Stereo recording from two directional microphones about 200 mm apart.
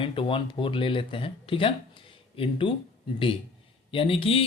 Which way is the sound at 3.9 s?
25° left (ahead or behind).